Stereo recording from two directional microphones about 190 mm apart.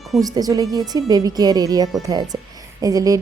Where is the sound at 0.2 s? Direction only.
20° right (ahead or behind).